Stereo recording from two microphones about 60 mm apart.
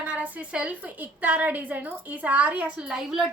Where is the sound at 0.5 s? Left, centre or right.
Right.